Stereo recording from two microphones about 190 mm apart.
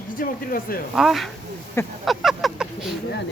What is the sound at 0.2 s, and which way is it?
Speech, 50° left (ahead or behind).